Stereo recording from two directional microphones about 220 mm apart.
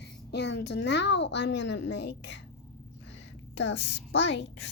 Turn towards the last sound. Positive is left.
turn(degrees=50)  # may be behind; listen again after turning